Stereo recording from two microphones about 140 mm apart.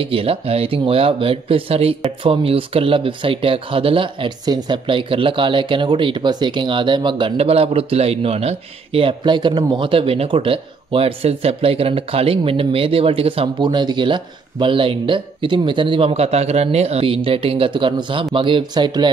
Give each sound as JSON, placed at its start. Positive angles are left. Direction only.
{"t": 0.0, "sound": "speech", "side_deg": -40}